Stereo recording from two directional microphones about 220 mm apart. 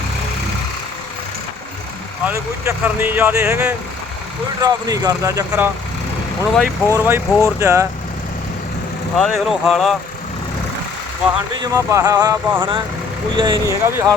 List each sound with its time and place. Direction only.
2.2 s speech: 10° right (ahead or behind)
6.5 s speech: 5° left (ahead or behind)
6.9 s speech: 10° right (ahead or behind)
9.1 s speech: centre (ahead or behind)
11.6 s speech: 15° right (ahead or behind)